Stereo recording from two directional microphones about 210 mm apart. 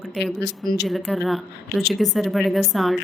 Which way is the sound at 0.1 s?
Centre (ahead or behind).